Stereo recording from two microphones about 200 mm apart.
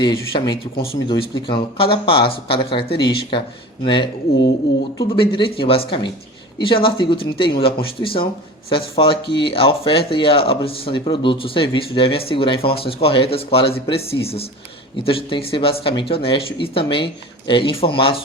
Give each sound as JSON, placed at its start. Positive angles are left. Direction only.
{"t": 0.0, "sound": "speech", "side_deg": 20}
{"t": 8.7, "sound": "speech", "side_deg": 25}